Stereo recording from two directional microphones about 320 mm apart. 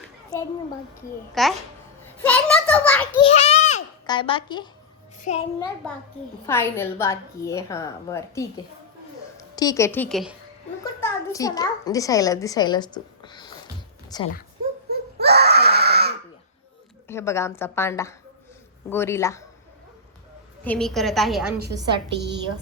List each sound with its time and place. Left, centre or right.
1.4 s a woman's voice: centre
2.0 s a sound: centre
3.2 s babbling: centre
5.2 s a child's voice: centre
6.4 s a child's voice: centre
14.8 s screaming: right
17.1 s a child's voice: centre
20.7 s a woman's voice: centre
21.7 s a woman's voice: centre